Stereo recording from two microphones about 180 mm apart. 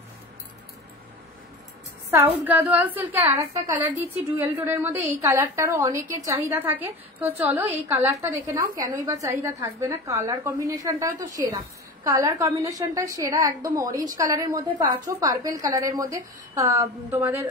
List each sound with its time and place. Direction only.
2.0 s a woman's voice: 10° right (ahead or behind)